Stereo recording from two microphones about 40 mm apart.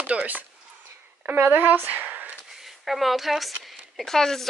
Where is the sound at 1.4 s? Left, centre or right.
Right.